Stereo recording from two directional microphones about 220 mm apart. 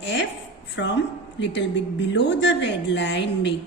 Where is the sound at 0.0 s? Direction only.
55° left (ahead or behind).